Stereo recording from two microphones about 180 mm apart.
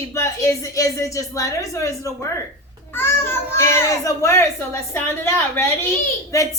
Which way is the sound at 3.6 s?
15° left (ahead or behind).